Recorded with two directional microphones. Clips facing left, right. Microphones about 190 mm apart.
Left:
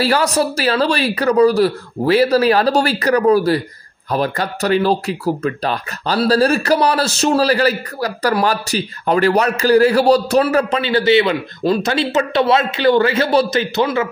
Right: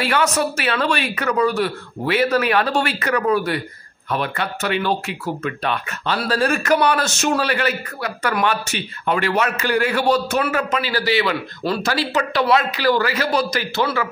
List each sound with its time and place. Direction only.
0.0 s speech: 35° left (ahead or behind)